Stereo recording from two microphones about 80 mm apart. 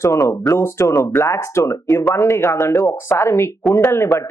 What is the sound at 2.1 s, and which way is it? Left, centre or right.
Speech, left.